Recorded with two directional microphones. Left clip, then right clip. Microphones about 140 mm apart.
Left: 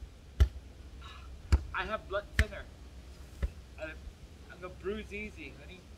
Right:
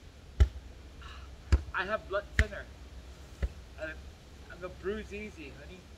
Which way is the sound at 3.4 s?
15° right (ahead or behind).